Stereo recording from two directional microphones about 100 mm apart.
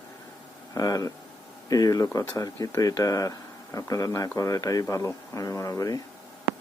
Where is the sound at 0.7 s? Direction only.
35° left (ahead or behind).